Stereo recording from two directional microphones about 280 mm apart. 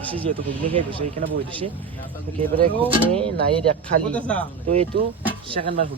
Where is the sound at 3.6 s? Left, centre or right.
Centre.